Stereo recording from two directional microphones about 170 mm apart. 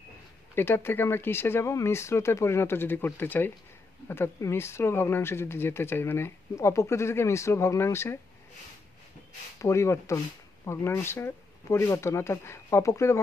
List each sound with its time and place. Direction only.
0.6 s speech: 10° left (ahead or behind)
9.6 s speech: 15° left (ahead or behind)